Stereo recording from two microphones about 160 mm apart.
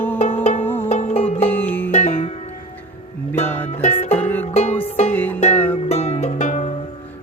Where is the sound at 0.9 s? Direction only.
45° left (ahead or behind).